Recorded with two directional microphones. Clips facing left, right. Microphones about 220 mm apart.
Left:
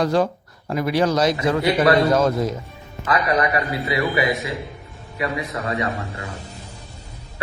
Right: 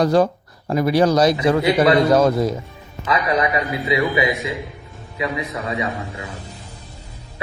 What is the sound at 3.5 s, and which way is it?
Speech, 15° right (ahead or behind).